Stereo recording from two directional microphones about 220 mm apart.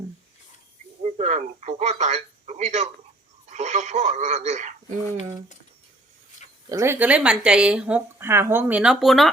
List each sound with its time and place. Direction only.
1.0 s speech: 30° right (ahead or behind)
6.7 s speech: 10° right (ahead or behind)